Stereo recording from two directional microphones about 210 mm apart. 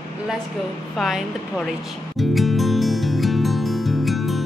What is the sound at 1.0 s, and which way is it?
Speech, centre (ahead or behind).